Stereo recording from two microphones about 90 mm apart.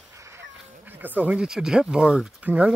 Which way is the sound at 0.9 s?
20° right (ahead or behind).